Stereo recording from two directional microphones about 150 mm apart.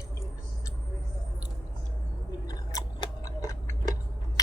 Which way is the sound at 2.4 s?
25° left (ahead or behind).